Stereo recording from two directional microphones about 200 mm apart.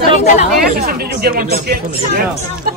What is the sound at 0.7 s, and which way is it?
Speech, 50° right (ahead or behind).